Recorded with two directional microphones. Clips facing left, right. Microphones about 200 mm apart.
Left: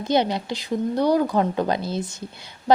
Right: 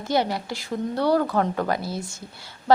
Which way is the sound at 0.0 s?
20° left (ahead or behind).